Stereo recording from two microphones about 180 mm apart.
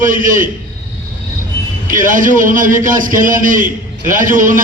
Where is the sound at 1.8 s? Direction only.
50° right (ahead or behind).